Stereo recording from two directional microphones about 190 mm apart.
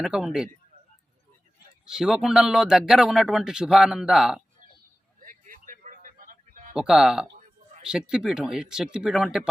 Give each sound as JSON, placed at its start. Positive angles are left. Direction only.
{"t": 0.0, "sound": "speech", "side_deg": 0}
{"t": 2.0, "sound": "speech", "side_deg": 0}
{"t": 5.2, "sound": "a sound", "side_deg": -45}
{"t": 6.7, "sound": "speech", "side_deg": -5}